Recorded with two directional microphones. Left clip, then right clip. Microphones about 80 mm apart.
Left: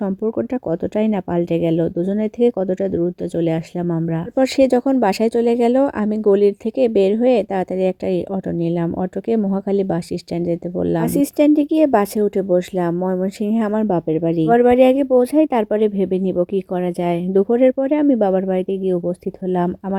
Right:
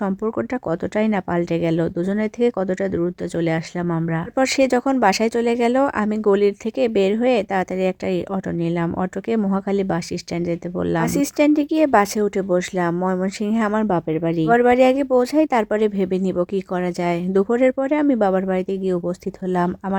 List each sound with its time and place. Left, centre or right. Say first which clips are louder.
0.0 s speech: left 2 dB; left